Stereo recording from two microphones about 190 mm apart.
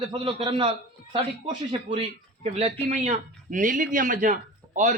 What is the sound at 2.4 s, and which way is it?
A man's voice, 35° right (ahead or behind).